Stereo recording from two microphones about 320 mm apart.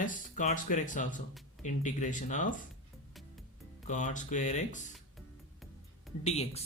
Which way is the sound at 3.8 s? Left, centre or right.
Left.